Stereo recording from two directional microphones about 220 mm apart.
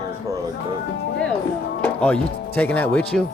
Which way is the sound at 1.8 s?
5° left (ahead or behind).